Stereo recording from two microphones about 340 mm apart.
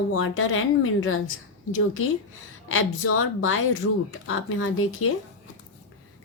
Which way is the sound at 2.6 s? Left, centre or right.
Left.